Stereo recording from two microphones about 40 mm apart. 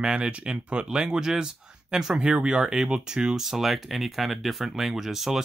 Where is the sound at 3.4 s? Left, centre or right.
Centre.